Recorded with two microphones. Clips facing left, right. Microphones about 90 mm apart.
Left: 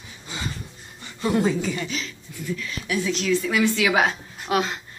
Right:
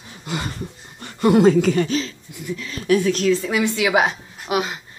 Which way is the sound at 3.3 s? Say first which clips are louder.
Right 1 dB; 30° right (ahead or behind).